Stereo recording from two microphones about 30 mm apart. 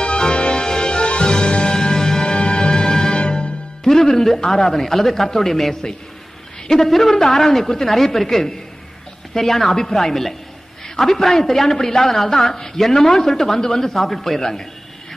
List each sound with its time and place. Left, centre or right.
0.0 s music: left
2.3 s music: left
3.9 s music: centre
4.6 s a woman's voice: centre
13.6 s speech: centre
13.9 s a woman's voice: centre